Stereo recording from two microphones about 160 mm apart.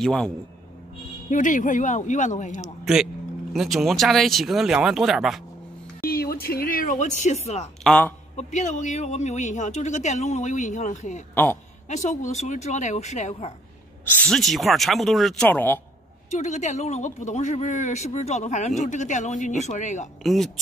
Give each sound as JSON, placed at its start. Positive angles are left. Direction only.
{"t": 0.0, "sound": "speech", "side_deg": 5}
{"t": 1.3, "sound": "speech", "side_deg": 55}
{"t": 2.6, "sound": "speech", "side_deg": 0}
{"t": 6.0, "sound": "speech", "side_deg": 70}
{"t": 7.8, "sound": "speech", "side_deg": 5}
{"t": 8.4, "sound": "speech", "side_deg": 45}
{"t": 14.0, "sound": "speech", "side_deg": 10}
{"t": 15.4, "sound": "a man's voice", "side_deg": 10}
{"t": 16.3, "sound": "speech", "side_deg": 45}